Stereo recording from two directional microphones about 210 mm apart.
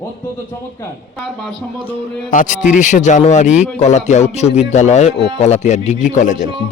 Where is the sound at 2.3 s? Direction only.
35° left (ahead or behind).